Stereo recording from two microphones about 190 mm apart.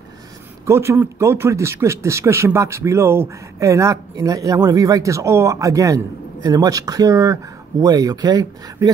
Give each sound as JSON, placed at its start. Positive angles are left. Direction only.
{"t": 0.7, "sound": "speech", "side_deg": -15}